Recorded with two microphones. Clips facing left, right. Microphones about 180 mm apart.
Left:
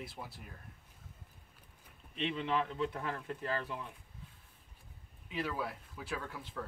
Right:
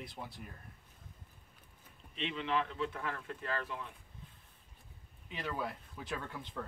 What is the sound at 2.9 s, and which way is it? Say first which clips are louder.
Speech: left 2 dB; 30° left (ahead or behind).